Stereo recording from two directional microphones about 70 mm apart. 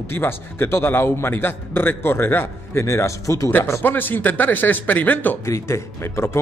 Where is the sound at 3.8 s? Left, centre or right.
Left.